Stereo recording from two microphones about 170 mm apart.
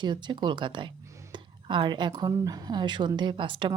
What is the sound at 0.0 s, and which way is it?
A woman's voice, 25° right (ahead or behind).